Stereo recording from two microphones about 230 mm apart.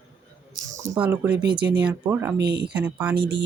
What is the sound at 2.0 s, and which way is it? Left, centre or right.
Speech, centre.